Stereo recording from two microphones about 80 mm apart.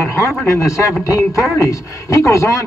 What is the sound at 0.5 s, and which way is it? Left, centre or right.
A man's voice, left.